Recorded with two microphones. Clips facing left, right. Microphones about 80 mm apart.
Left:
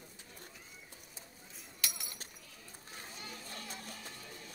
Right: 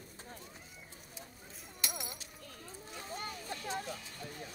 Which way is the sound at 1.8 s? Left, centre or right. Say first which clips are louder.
Right 3 dB; right.